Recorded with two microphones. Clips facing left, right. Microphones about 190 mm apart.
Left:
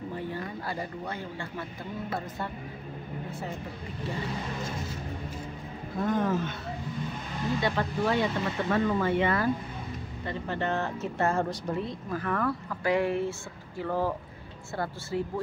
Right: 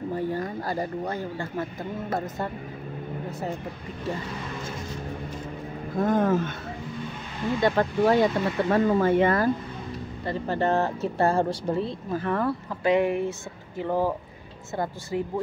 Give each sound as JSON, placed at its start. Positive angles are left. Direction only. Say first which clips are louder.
{"t": 0.1, "sound": "speech", "louder": "right 9 dB", "side_deg": -40}
{"t": 5.9, "sound": "speech", "louder": "right 5 dB", "side_deg": -50}
{"t": 7.6, "sound": "speech", "louder": "right 8 dB", "side_deg": -45}